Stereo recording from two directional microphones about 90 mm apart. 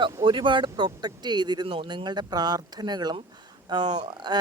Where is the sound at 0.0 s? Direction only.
65° right (ahead or behind).